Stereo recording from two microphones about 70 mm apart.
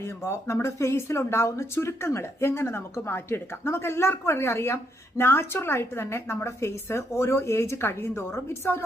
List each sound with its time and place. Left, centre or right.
0.2 s speech: left